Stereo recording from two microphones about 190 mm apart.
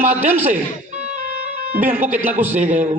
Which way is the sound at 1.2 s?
50° right (ahead or behind).